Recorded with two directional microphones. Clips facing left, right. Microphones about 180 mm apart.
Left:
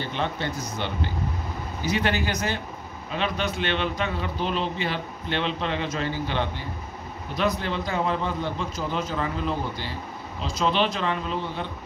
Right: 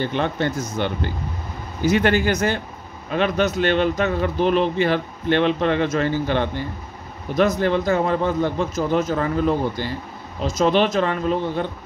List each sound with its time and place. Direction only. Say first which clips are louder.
0.1 s a man's voice: right 6 dB; 50° right (ahead or behind)